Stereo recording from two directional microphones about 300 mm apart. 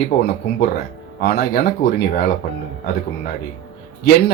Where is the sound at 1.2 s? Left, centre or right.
Left.